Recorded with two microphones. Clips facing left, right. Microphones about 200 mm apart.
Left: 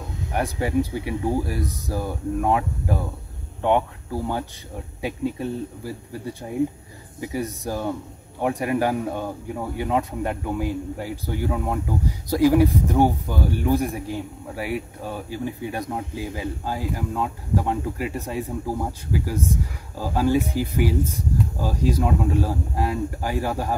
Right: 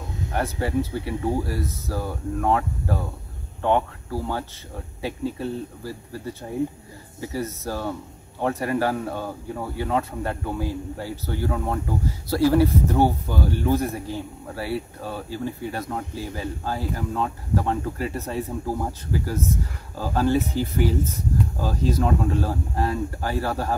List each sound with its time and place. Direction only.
0.3 s speech: 15° left (ahead or behind)
20.0 s speech: 10° left (ahead or behind)